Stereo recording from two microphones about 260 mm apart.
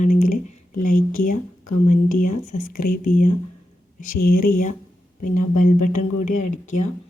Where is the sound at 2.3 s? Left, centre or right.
Left.